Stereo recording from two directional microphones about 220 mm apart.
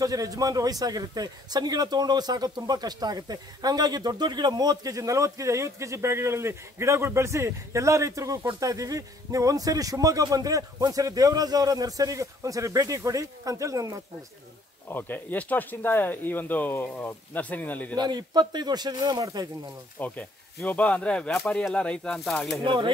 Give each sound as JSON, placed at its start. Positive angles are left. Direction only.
{"t": 0.0, "sound": "a man's voice", "side_deg": -15}
{"t": 14.9, "sound": "speech", "side_deg": 10}
{"t": 17.9, "sound": "speech", "side_deg": -20}
{"t": 20.0, "sound": "speech", "side_deg": 5}
{"t": 22.6, "sound": "speech", "side_deg": -20}